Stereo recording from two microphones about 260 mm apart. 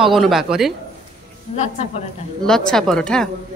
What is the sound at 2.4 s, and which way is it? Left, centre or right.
Speech, centre.